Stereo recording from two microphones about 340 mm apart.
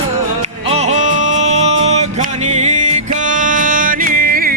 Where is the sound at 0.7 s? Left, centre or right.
Centre.